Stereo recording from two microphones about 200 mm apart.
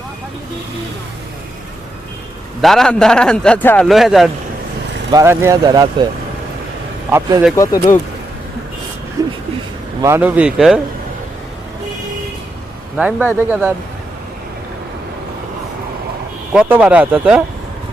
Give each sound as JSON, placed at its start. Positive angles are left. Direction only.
{"t": 2.6, "sound": "a man's voice", "side_deg": 0}
{"t": 5.1, "sound": "speech", "side_deg": -15}
{"t": 7.1, "sound": "speech", "side_deg": -20}
{"t": 7.5, "sound": "speech", "side_deg": 15}
{"t": 9.2, "sound": "a sound", "side_deg": -15}
{"t": 10.0, "sound": "speech", "side_deg": -10}
{"t": 13.0, "sound": "speech", "side_deg": -5}
{"t": 16.5, "sound": "speech", "side_deg": -5}